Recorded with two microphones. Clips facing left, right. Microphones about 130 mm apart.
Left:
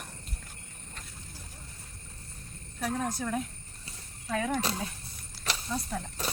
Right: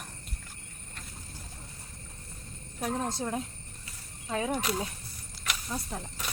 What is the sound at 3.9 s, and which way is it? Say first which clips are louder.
Horse: left 5 dB; 30° left (ahead or behind).